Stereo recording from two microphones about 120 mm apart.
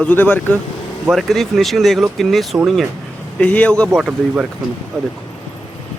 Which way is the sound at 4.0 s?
5° right (ahead or behind).